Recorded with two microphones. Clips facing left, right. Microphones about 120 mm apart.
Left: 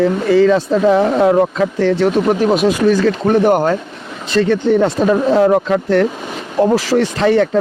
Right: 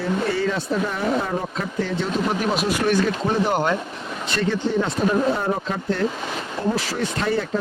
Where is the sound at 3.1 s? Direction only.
60° left (ahead or behind).